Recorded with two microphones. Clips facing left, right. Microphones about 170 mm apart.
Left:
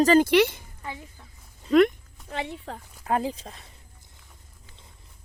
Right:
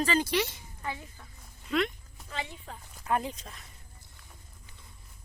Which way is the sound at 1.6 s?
50° left (ahead or behind).